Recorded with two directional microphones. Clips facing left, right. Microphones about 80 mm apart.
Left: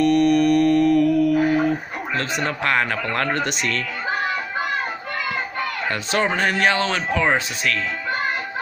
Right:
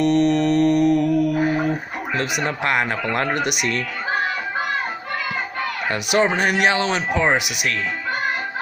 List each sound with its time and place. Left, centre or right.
0.0 s mantra: right
5.9 s speech: centre